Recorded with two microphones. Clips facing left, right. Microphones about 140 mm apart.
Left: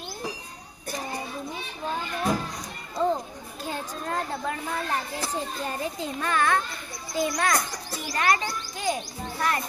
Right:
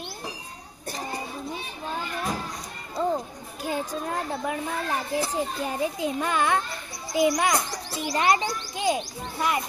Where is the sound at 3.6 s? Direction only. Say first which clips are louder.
Right 4 dB; 15° right (ahead or behind).